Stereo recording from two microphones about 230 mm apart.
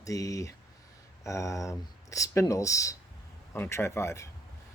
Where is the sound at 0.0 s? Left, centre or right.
Centre.